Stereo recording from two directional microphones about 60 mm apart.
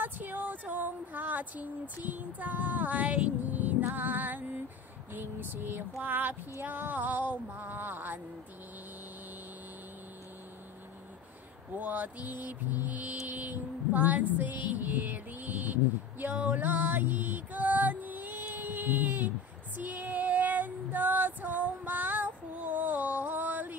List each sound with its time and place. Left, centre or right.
0.0 s female singing: right
3.9 s a sound: right
11.7 s mantra: right
19.8 s female singing: right